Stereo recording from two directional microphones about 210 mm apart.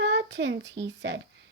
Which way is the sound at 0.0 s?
55° right (ahead or behind).